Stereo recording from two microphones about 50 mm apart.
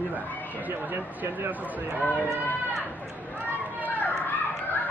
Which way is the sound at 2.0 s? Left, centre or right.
Left.